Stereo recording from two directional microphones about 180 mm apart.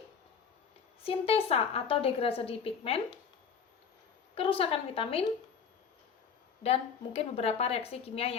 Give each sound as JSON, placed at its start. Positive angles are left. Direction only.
{"t": 1.0, "sound": "a woman's voice", "side_deg": 30}
{"t": 4.4, "sound": "a woman's voice", "side_deg": 30}
{"t": 6.6, "sound": "a woman's voice", "side_deg": 35}